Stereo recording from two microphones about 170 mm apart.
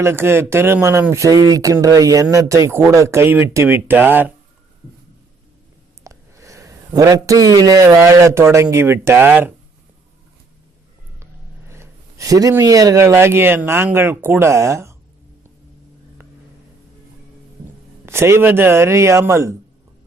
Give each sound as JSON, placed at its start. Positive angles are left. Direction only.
{"t": 0.0, "sound": "speech", "side_deg": -15}
{"t": 6.0, "sound": "speech", "side_deg": -20}
{"t": 11.7, "sound": "speech", "side_deg": -15}
{"t": 18.0, "sound": "speech", "side_deg": -15}